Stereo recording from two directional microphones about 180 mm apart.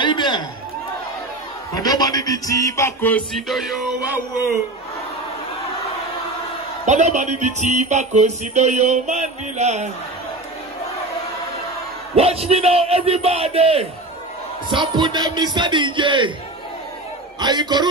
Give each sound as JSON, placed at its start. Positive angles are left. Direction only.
{"t": 0.0, "sound": "a sound", "side_deg": 25}
{"t": 1.8, "sound": "music", "side_deg": 20}
{"t": 6.9, "sound": "speech", "side_deg": -40}
{"t": 12.2, "sound": "speech", "side_deg": -35}
{"t": 17.4, "sound": "speech", "side_deg": -25}